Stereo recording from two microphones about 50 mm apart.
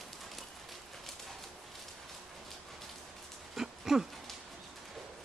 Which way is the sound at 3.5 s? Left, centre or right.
Centre.